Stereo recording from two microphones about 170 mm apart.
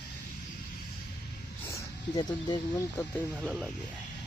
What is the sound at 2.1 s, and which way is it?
Speech, 25° left (ahead or behind).